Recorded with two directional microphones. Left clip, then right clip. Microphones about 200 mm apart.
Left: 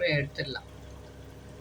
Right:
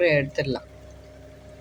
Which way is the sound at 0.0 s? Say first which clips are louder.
Right 8 dB; 45° right (ahead or behind).